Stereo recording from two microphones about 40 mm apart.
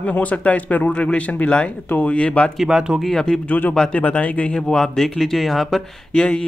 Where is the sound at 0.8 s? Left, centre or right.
Left.